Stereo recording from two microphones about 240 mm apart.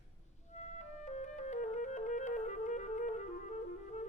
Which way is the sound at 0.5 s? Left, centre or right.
Left.